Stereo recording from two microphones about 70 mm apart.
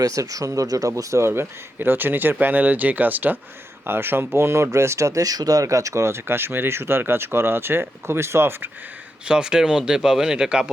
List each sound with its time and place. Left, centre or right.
0.0 s speech: right
1.2 s speech: right
9.2 s speech: centre